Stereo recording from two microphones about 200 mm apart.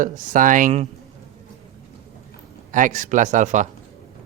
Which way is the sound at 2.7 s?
40° right (ahead or behind).